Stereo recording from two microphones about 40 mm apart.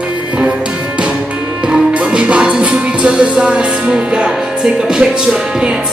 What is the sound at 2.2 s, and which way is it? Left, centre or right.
Music, right.